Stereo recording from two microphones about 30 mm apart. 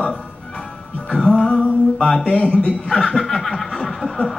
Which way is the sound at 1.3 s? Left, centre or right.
Left.